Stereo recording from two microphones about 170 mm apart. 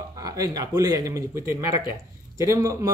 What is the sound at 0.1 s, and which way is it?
Speech, 20° right (ahead or behind).